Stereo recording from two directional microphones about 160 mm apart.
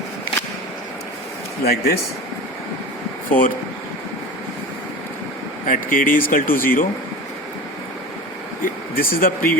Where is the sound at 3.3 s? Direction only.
60° left (ahead or behind).